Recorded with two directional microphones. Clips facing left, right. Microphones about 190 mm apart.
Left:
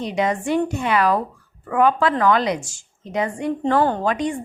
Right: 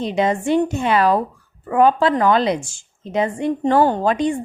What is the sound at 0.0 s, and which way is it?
Speech, 25° right (ahead or behind).